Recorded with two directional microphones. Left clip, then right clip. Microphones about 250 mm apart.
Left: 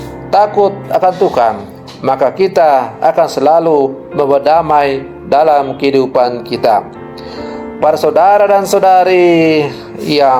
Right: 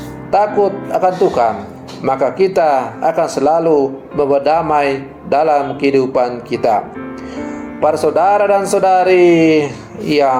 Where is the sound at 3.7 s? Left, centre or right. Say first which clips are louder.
Left 2 dB; left.